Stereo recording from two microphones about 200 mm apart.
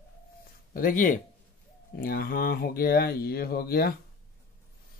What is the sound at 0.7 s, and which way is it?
Speech, 45° left (ahead or behind).